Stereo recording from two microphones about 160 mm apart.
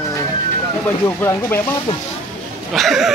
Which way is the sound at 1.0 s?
15° left (ahead or behind).